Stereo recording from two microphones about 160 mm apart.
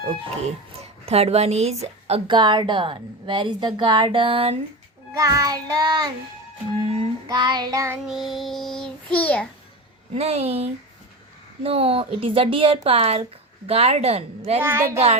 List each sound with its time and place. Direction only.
0.8 s a woman's voice: 40° right (ahead or behind)
5.1 s child singing: 20° right (ahead or behind)
6.8 s a woman's voice: 40° right (ahead or behind)
7.3 s child singing: 25° right (ahead or behind)
7.9 s child singing: centre (ahead or behind)
10.2 s a woman's voice: 40° right (ahead or behind)
14.6 s a woman's voice: 15° right (ahead or behind)
14.9 s a woman's voice: 40° right (ahead or behind)